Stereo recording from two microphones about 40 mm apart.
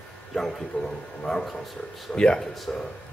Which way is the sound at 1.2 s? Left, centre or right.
Centre.